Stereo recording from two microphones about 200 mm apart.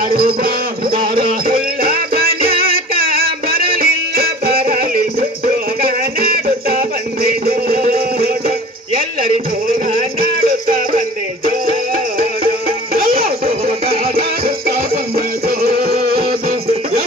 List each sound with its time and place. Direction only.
0.2 s music: 50° right (ahead or behind)
6.7 s music: 45° right (ahead or behind)
12.4 s music: 50° right (ahead or behind)